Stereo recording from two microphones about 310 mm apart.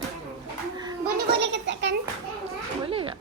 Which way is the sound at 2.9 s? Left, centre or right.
Centre.